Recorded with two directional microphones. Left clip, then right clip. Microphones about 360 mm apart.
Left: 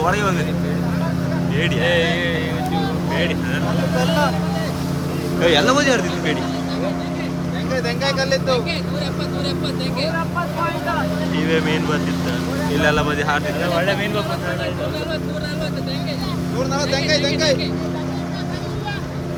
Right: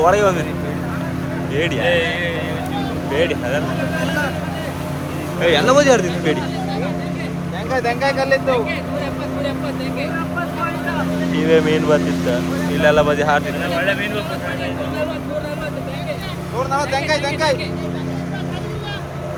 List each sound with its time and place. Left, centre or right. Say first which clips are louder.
0.0 s speech: right 5 dB; centre
1.8 s speech: even; left
5.4 s speech: right 2 dB; centre
7.7 s speech: right 4 dB; centre
11.3 s speech: right 6 dB; centre
16.7 s speech: right 1 dB; centre